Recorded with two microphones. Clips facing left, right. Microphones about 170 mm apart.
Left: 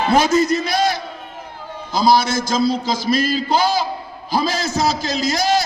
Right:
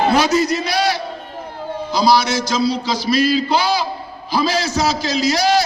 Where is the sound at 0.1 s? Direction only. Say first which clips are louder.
Left 1 dB; 50° left (ahead or behind).